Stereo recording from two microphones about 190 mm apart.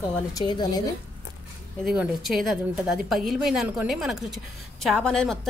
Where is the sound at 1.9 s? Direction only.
5° right (ahead or behind).